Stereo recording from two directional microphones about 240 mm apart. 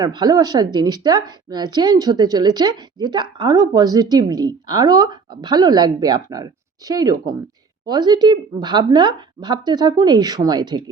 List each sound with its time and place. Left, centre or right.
0.0 s a woman's voice: centre